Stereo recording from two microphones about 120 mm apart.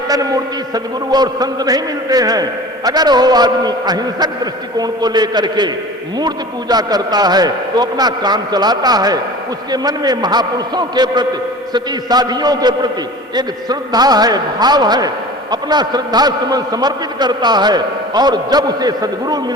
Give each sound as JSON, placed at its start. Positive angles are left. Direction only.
{"t": 0.7, "sound": "a man's voice", "side_deg": -35}